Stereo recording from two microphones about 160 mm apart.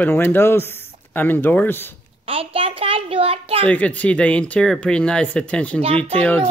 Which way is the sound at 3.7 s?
10° left (ahead or behind).